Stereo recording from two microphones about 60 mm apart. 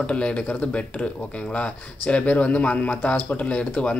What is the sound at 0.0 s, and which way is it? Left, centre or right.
Speech, centre.